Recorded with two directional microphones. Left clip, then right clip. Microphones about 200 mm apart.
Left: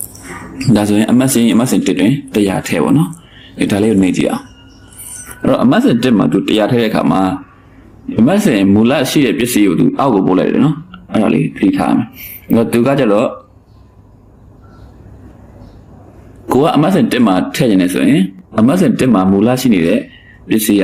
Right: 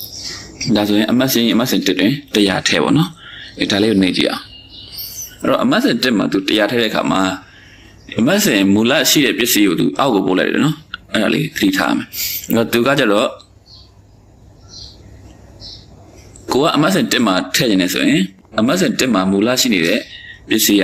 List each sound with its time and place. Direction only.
0.6 s speech: 10° left (ahead or behind)
5.7 s speech: 15° left (ahead or behind)
16.6 s speech: 15° left (ahead or behind)